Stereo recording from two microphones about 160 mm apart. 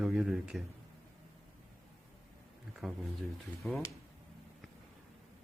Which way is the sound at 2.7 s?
Centre (ahead or behind).